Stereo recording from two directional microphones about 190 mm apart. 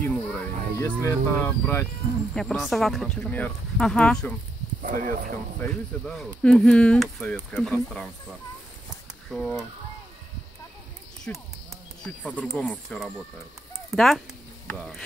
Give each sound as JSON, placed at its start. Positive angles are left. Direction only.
{"t": 0.0, "sound": "speech", "side_deg": 5}
{"t": 2.3, "sound": "speech", "side_deg": 0}
{"t": 4.8, "sound": "speech", "side_deg": -45}
{"t": 5.6, "sound": "speech", "side_deg": 5}
{"t": 9.3, "sound": "speech", "side_deg": 0}
{"t": 11.3, "sound": "speech", "side_deg": 5}